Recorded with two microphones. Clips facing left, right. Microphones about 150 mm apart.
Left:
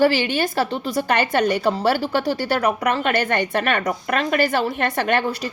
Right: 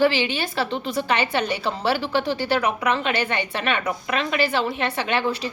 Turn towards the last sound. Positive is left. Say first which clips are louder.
# left 3 dB
turn(degrees=45)  # may be behind; listen again after turning